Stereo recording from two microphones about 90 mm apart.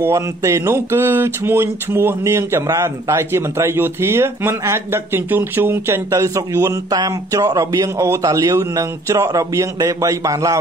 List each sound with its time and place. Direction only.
0.0 s speech: 30° right (ahead or behind)
6.9 s a man's voice: 45° right (ahead or behind)